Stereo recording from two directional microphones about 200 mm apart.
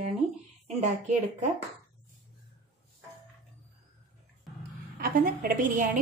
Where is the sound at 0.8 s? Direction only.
35° right (ahead or behind).